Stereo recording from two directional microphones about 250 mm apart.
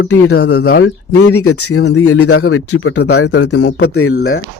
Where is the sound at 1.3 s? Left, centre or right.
Left.